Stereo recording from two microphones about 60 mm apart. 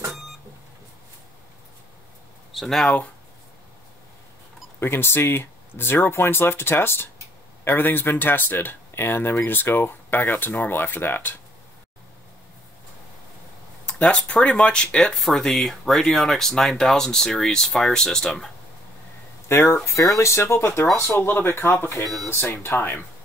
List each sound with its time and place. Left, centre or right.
2.5 s speech: centre
4.7 s speech: left
13.8 s speech: centre
19.4 s speech: left
21.2 s speech: left
22.8 s speech: left